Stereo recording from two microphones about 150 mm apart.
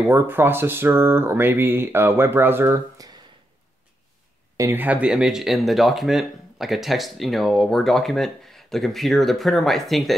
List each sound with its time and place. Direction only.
0.0 s speech: 15° right (ahead or behind)
4.6 s speech: 15° right (ahead or behind); by 10.1 s centre (ahead or behind)